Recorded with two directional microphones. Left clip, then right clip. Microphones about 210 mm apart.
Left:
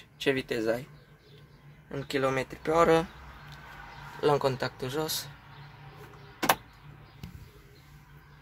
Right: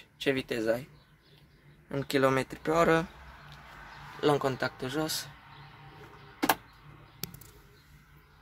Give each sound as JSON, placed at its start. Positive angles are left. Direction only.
{"t": 0.2, "sound": "speech", "side_deg": -5}
{"t": 1.9, "sound": "speech", "side_deg": -25}
{"t": 4.2, "sound": "speech", "side_deg": -10}